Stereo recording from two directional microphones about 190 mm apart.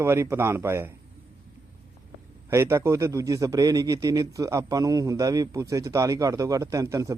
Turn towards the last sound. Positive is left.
turn(degrees=-15)  # may be behind; listen again after turning